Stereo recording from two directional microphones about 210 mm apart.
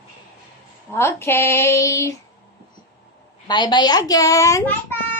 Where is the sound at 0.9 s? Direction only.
10° left (ahead or behind).